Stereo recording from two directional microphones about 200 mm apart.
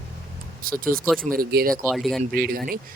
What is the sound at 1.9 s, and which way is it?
Speech, centre (ahead or behind).